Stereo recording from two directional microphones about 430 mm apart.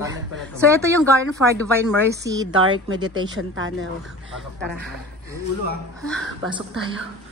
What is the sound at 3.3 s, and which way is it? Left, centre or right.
Speech, right.